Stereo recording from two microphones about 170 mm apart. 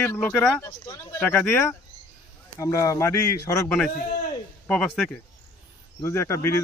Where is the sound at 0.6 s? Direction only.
15° left (ahead or behind).